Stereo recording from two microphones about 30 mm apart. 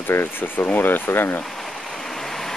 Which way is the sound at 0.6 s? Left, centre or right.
Left.